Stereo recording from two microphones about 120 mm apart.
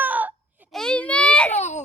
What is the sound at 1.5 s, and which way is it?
Baby cry, 75° left (ahead or behind).